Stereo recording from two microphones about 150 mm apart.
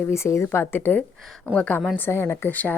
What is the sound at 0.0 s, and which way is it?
A woman's voice, 20° left (ahead or behind).